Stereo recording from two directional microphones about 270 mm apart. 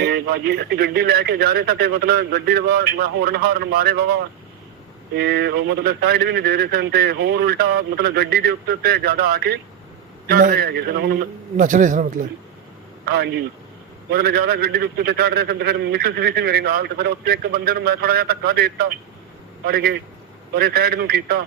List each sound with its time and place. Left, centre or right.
0.0 s a man's voice: right
5.2 s a man's voice: right